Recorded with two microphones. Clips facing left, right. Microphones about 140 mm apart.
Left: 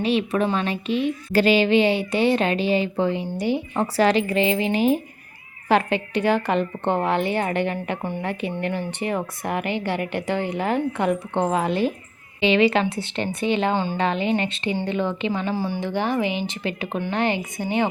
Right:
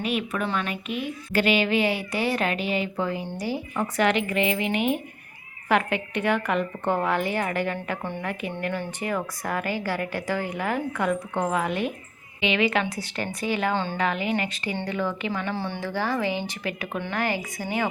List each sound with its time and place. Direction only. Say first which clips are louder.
0.0 s a woman's voice: left 6 dB; 30° left (ahead or behind)
3.9 s a woman's voice: left 4 dB; 35° left (ahead or behind)
15.5 s a woman's voice: left 4 dB; 10° left (ahead or behind)